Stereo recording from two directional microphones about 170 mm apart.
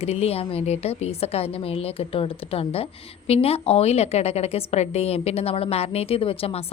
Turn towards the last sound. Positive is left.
turn(degrees=35)  # may be behind; listen again after turning